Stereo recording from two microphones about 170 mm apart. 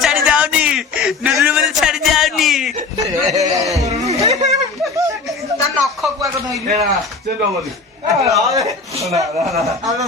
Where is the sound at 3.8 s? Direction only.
20° right (ahead or behind).